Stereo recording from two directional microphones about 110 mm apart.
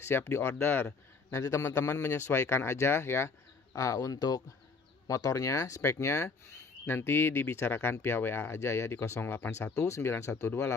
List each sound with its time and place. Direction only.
0.0 s speech: 20° left (ahead or behind)